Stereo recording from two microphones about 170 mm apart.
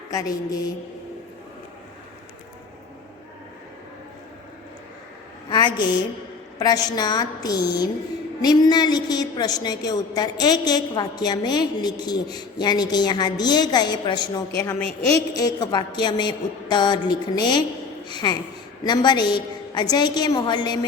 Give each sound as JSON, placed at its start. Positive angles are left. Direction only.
{"t": 5.5, "sound": "a sound", "side_deg": 25}
{"t": 6.6, "sound": "a woman's voice", "side_deg": 25}
{"t": 14.8, "sound": "a woman's voice", "side_deg": -35}
{"t": 15.3, "sound": "a woman's voice", "side_deg": 20}